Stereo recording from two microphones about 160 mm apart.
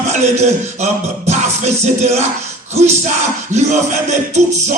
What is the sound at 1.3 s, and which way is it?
Music, 45° right (ahead or behind).